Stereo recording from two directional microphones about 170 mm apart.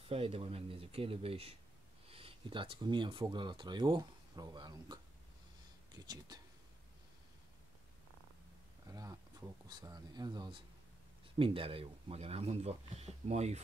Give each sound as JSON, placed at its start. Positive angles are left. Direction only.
{"t": 0.0, "sound": "speech", "side_deg": -35}
{"t": 6.0, "sound": "speech", "side_deg": -25}
{"t": 9.7, "sound": "speech", "side_deg": -25}